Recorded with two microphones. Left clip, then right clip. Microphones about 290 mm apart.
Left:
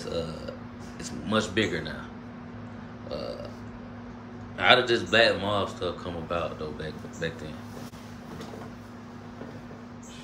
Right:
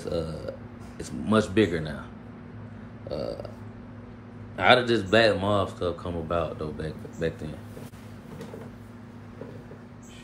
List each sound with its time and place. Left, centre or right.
0.0 s speech: centre
3.1 s burping: centre
4.6 s speech: centre